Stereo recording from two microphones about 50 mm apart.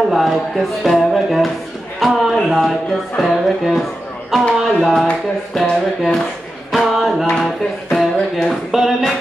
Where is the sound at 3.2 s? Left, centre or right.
Centre.